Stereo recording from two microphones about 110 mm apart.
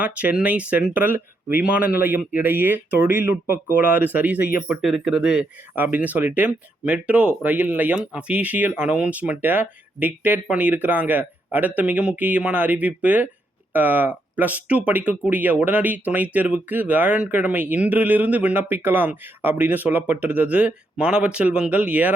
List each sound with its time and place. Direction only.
0.0 s speech: 15° right (ahead or behind)
4.8 s speech: 5° right (ahead or behind)
5.7 s speech: 15° right (ahead or behind)